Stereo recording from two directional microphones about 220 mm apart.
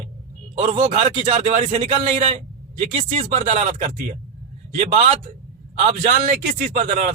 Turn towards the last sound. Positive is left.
turn(degrees=-35)  # may be behind; listen again after turning